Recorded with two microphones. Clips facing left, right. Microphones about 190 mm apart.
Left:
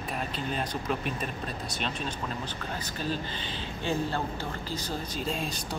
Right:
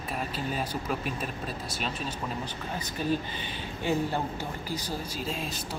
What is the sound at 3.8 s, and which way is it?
Speech, 15° right (ahead or behind).